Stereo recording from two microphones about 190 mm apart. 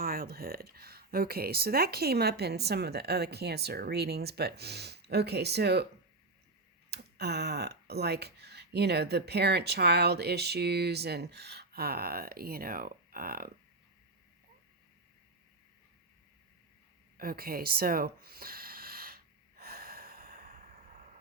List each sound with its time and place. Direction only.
0.0 s speech: 50° right (ahead or behind)
6.9 s speech: 60° right (ahead or behind)
17.2 s a sound: 50° right (ahead or behind)